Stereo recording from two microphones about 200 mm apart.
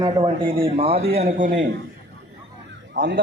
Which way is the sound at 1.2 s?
40° right (ahead or behind).